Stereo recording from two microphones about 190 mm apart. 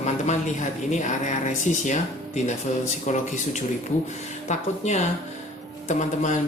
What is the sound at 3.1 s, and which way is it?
Speech, 40° left (ahead or behind).